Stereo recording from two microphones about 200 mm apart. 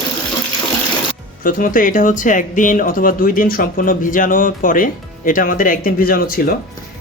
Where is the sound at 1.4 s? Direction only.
45° left (ahead or behind).